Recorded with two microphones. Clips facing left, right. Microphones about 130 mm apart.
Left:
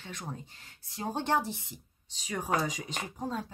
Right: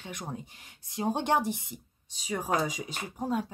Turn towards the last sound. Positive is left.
turn(degrees=-10)  # may be behind; listen again after turning